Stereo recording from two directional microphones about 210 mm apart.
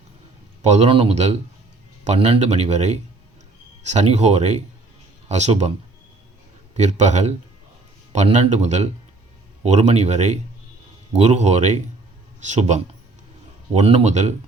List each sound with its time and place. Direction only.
0.6 s speech: 30° right (ahead or behind)
6.7 s speech: 35° right (ahead or behind)